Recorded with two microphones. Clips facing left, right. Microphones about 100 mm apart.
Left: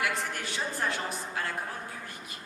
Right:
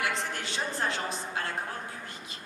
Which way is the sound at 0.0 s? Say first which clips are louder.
Even; 20° right (ahead or behind).